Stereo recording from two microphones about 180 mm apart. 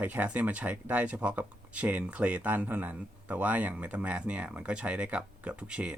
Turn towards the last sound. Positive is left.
turn(degrees=-5)  # may be behind; listen again after turning